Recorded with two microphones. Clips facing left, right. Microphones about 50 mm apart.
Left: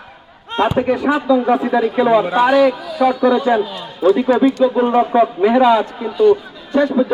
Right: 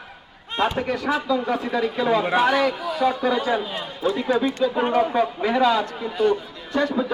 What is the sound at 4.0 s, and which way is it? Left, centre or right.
A man's voice, left.